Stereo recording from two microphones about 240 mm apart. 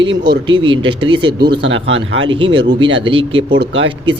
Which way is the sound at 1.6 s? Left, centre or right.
Right.